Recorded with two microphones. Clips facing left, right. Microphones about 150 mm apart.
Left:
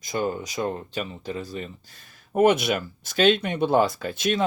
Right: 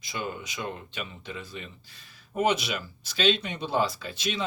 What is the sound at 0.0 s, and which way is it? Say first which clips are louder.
Speech: left 8 dB; 40° left (ahead or behind).